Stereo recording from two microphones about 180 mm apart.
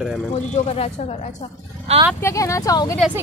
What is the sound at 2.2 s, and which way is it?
Speech, 15° left (ahead or behind).